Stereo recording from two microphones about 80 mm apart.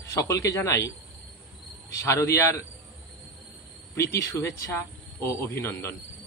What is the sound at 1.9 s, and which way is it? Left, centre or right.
Speech, left.